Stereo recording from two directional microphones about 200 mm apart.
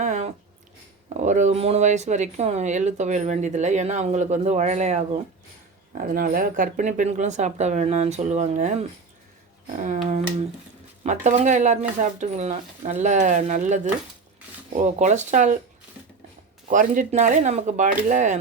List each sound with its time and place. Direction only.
0.0 s a sound: 35° right (ahead or behind)
1.1 s speech: 35° right (ahead or behind)
5.9 s speech: 45° right (ahead or behind)
9.8 s speech: 35° right (ahead or behind)
16.6 s speech: 40° right (ahead or behind)